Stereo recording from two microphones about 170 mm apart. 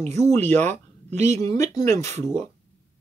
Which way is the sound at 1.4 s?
20° left (ahead or behind).